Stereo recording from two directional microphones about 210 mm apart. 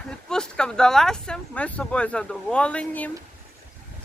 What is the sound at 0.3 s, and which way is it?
Speech, 5° left (ahead or behind).